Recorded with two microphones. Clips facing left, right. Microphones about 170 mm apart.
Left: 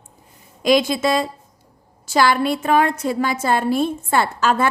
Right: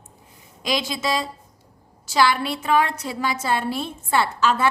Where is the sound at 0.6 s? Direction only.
50° left (ahead or behind).